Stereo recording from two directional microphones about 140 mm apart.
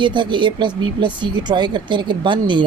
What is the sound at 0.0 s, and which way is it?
Speech, 35° right (ahead or behind).